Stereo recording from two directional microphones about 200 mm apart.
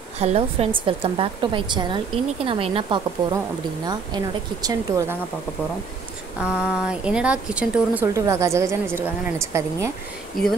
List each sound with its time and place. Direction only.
0.2 s a woman's voice: 30° right (ahead or behind)
6.4 s speech: 5° right (ahead or behind)
10.4 s speech: centre (ahead or behind)